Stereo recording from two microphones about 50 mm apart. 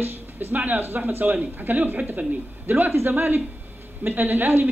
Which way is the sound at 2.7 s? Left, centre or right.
Right.